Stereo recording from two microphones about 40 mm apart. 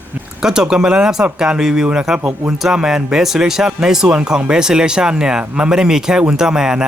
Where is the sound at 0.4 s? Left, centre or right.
Centre.